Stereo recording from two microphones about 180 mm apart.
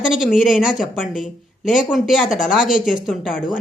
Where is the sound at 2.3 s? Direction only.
45° left (ahead or behind).